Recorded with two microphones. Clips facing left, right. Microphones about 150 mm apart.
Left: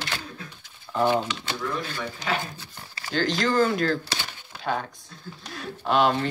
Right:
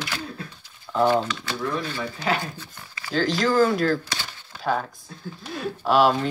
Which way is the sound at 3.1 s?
Centre (ahead or behind).